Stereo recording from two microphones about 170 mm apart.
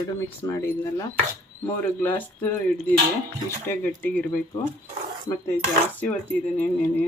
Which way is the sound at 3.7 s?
10° left (ahead or behind).